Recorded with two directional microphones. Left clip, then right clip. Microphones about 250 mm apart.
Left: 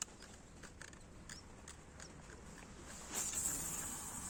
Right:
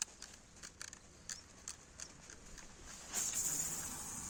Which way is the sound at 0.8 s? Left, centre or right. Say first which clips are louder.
Right 2 dB; right.